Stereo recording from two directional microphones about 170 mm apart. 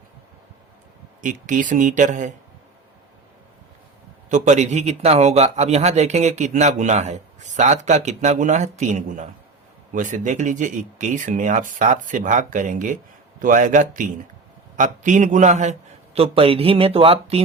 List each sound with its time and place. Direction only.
1.2 s speech: 50° right (ahead or behind)
4.3 s speech: 45° right (ahead or behind)
16.1 s speech: 35° right (ahead or behind)